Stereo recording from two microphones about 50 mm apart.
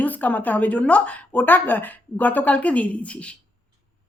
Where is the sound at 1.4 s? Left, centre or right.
Left.